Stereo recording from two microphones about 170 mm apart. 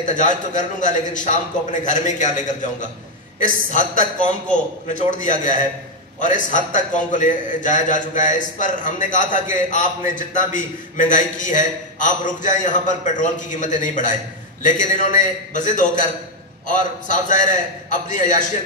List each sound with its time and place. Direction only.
0.0 s a man's voice: 50° left (ahead or behind)
5.1 s a man's voice: 50° left (ahead or behind)